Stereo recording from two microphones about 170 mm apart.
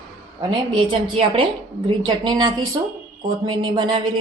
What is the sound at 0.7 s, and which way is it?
A woman's voice, 30° right (ahead or behind).